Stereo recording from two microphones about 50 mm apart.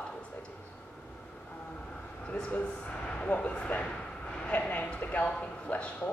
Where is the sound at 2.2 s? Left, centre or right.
Left.